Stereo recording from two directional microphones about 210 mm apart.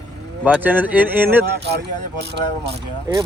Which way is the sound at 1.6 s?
55° right (ahead or behind).